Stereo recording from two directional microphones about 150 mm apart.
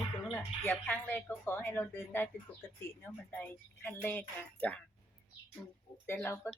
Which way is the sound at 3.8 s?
15° left (ahead or behind).